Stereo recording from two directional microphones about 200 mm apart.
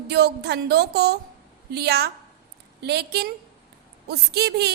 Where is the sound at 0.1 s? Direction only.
55° right (ahead or behind).